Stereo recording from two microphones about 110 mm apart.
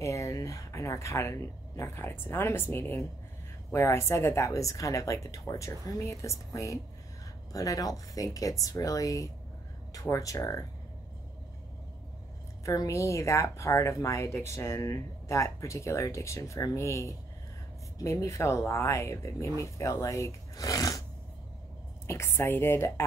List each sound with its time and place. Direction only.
0.0 s speech: 30° left (ahead or behind)
12.6 s speech: 30° left (ahead or behind)
22.0 s speech: 25° left (ahead or behind)